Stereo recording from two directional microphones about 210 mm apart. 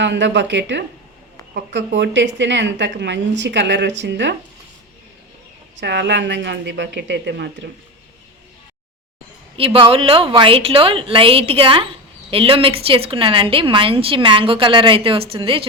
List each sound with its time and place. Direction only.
0.0 s a woman's voice: 60° right (ahead or behind)
5.8 s a woman's voice: 55° right (ahead or behind)
9.6 s a woman's voice: 25° right (ahead or behind)